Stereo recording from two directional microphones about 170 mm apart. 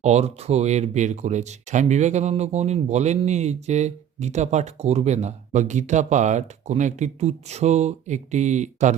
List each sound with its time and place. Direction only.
0.0 s speech: 40° right (ahead or behind)